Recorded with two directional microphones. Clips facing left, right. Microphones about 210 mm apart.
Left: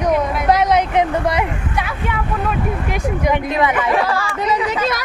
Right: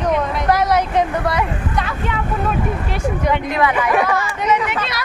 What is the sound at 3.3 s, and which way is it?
Speech, 20° left (ahead or behind).